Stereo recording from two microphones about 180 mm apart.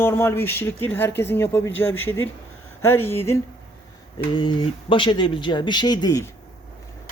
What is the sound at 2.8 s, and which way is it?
Speech, 10° left (ahead or behind).